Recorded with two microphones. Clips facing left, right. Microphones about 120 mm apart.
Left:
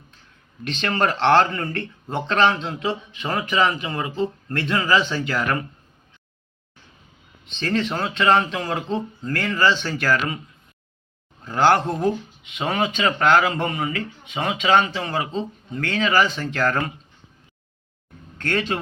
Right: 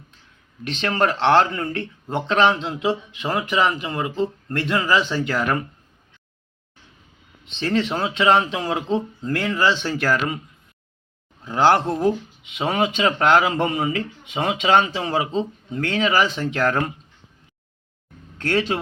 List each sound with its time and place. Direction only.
0.8 s speech: 5° right (ahead or behind)
7.6 s speech: 10° right (ahead or behind)
11.4 s speech: 15° right (ahead or behind)
16.6 s speech: 5° right (ahead or behind)